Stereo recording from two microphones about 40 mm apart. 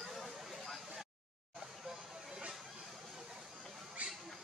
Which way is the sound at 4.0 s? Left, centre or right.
Right.